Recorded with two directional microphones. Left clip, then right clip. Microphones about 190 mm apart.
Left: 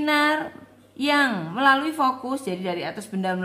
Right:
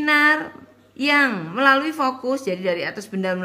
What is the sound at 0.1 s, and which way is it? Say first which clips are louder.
A woman's voice: right 5 dB; 15° right (ahead or behind).